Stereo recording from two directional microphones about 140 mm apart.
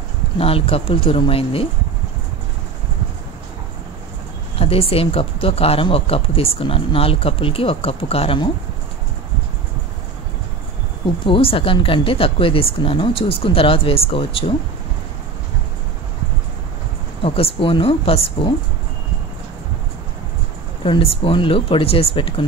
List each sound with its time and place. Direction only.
0.4 s speech: 40° left (ahead or behind)
4.6 s speech: 45° left (ahead or behind)
11.2 s a woman's voice: 40° left (ahead or behind)
17.2 s a woman's voice: 40° left (ahead or behind)
20.8 s a woman's voice: 40° left (ahead or behind)